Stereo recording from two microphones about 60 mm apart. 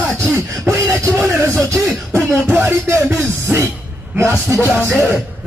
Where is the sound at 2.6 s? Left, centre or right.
Right.